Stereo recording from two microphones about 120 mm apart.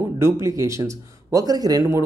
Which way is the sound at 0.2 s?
25° right (ahead or behind).